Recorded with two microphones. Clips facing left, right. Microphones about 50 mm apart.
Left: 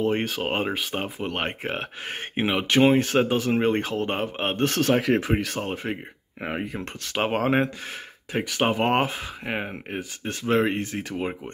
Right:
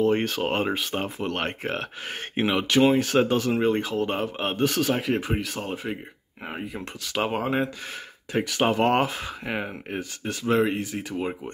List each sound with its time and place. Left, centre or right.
0.0 s speech: left
2.7 s speech: left
3.2 s speech: left
3.6 s speech: left
4.6 s speech: left
8.3 s speech: left
10.5 s speech: left